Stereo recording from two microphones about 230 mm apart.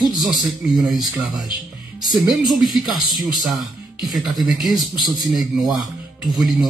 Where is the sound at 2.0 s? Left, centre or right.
Centre.